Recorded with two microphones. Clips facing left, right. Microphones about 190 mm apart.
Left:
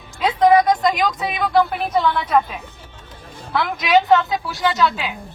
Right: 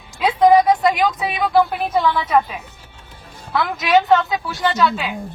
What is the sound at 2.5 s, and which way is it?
Music, 10° right (ahead or behind).